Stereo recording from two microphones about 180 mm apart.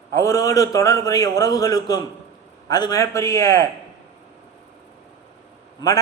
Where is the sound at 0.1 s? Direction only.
15° left (ahead or behind).